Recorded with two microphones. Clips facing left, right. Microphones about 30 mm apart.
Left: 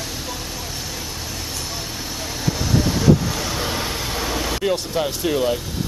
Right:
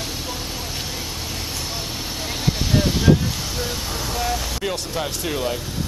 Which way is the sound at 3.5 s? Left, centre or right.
Left.